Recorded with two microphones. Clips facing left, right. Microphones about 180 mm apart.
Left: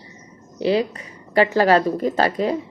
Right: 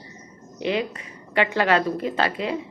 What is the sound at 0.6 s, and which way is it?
A woman's voice, 35° left (ahead or behind).